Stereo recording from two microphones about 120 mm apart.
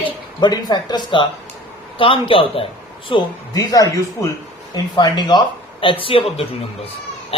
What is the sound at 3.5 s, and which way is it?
A man's voice, 30° left (ahead or behind).